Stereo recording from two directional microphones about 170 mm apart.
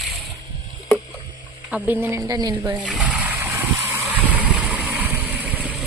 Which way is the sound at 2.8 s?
5° right (ahead or behind).